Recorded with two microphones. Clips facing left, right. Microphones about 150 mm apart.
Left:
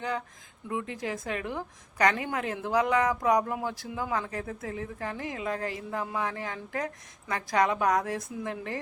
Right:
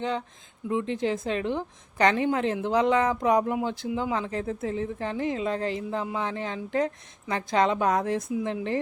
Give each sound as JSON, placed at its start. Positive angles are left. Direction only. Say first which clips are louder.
{"t": 0.7, "sound": "a woman's voice", "louder": "right 6 dB", "side_deg": -25}